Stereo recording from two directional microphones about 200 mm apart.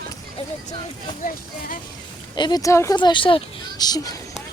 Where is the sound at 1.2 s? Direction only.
45° left (ahead or behind).